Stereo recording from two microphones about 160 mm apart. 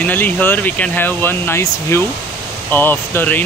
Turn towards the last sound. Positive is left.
turn(degrees=10)  # may be behind; listen again after turning